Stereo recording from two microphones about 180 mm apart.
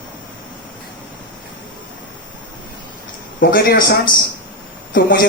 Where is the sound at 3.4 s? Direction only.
60° left (ahead or behind).